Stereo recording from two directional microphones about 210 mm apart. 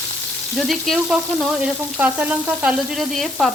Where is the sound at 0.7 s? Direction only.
Centre (ahead or behind).